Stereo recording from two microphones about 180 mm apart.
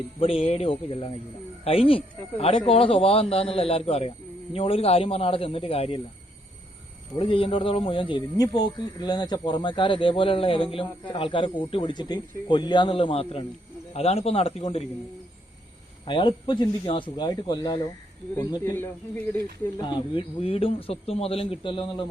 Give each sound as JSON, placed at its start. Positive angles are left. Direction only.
{"t": 0.2, "sound": "speech", "side_deg": 30}
{"t": 7.2, "sound": "speech", "side_deg": 30}
{"t": 16.0, "sound": "speech", "side_deg": 25}
{"t": 18.3, "sound": "speech", "side_deg": 10}
{"t": 19.8, "sound": "speech", "side_deg": 25}